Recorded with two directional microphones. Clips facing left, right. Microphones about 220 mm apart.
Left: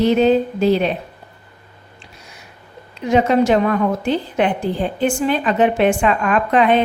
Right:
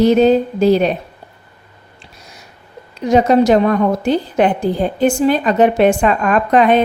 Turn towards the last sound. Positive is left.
turn(degrees=-45)  # may be behind; listen again after turning